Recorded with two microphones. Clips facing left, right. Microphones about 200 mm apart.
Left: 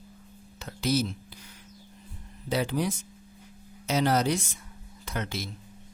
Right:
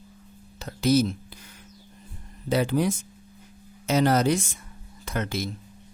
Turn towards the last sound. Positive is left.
turn(degrees=-50)  # may be behind; listen again after turning